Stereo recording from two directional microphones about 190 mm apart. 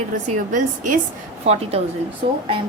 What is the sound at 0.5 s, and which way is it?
A woman's voice, 40° right (ahead or behind).